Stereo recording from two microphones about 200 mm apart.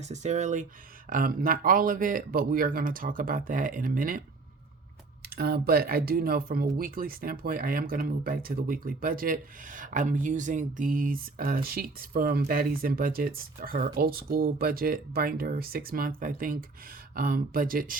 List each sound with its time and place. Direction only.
0.0 s speech: 35° right (ahead or behind)
5.2 s speech: 50° right (ahead or behind)